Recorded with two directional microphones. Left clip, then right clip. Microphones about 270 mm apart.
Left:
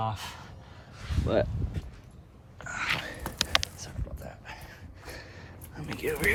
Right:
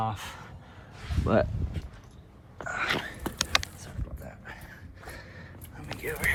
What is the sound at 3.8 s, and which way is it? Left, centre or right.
Rowboat, left.